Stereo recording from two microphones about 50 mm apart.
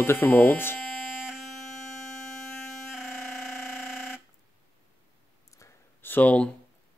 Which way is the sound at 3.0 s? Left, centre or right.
Centre.